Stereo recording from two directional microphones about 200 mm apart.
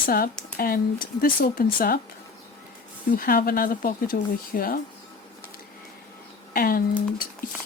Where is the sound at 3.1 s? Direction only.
45° left (ahead or behind).